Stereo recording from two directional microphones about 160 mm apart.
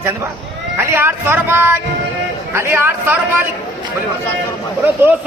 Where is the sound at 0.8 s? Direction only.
15° right (ahead or behind).